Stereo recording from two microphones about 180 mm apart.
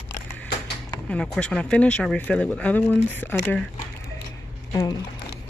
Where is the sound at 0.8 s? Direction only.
5° left (ahead or behind).